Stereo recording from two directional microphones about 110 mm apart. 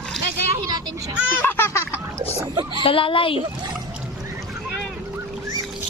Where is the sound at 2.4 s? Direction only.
40° right (ahead or behind).